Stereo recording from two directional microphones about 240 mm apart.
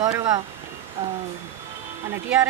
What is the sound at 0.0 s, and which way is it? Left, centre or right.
Speech, centre.